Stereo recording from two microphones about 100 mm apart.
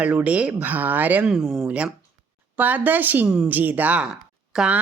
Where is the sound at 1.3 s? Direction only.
5° right (ahead or behind).